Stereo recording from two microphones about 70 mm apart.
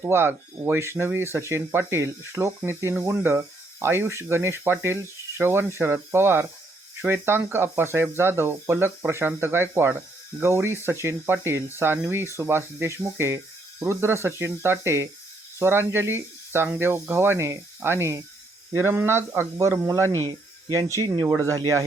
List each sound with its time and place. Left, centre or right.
0.0 s speech: right